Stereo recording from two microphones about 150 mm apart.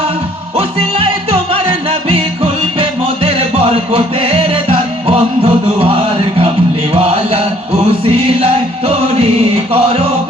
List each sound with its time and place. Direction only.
0.5 s music: 40° right (ahead or behind)
6.9 s chant: 40° right (ahead or behind)
7.9 s music: 40° right (ahead or behind)